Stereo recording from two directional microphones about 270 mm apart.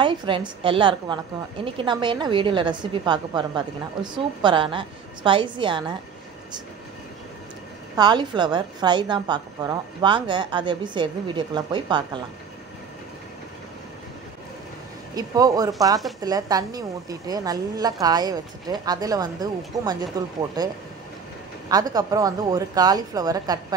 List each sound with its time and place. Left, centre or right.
0.0 s a woman's voice: centre
7.9 s a woman's voice: centre
15.1 s a woman's voice: centre